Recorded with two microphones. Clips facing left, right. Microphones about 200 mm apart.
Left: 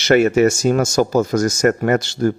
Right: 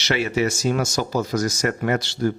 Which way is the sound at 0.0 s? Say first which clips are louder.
Left 9 dB; 50° left (ahead or behind).